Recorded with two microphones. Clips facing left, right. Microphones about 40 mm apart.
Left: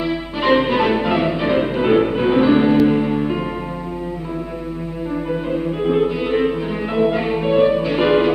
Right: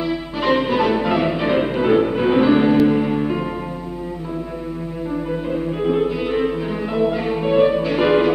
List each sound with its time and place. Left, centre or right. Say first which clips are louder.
0.0 s music: left 1 dB; centre
1.2 s music: left 1 dB; centre
1.8 s music: left 1 dB; centre
2.1 s music: left 1 dB; centre
5.3 s music: left 3 dB; centre
7.4 s music: even; centre